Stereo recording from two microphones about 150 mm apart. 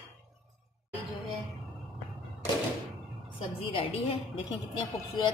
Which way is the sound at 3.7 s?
35° left (ahead or behind).